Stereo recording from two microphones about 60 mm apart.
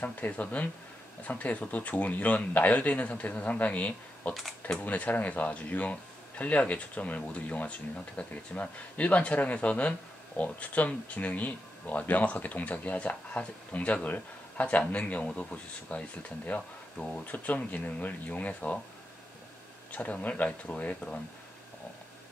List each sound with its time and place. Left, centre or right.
0.0 s speech: left
4.3 s speech: centre
4.7 s speech: left
19.9 s speech: left